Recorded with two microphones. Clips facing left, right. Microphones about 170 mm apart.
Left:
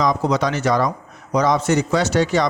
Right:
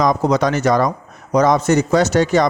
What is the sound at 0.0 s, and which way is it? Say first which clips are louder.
A man's voice: right 3 dB; 45° right (ahead or behind).